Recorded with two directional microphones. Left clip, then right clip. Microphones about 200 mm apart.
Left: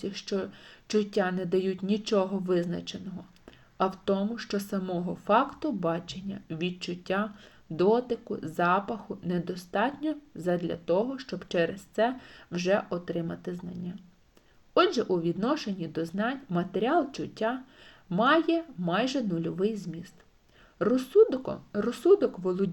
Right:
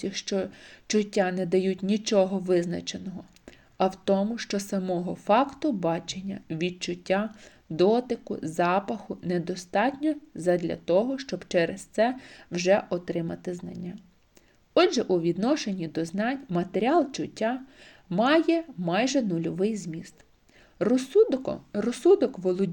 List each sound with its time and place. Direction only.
0.0 s speech: 25° right (ahead or behind)